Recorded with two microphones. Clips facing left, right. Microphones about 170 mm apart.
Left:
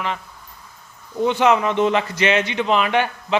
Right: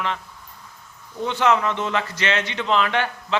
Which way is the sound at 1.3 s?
15° left (ahead or behind).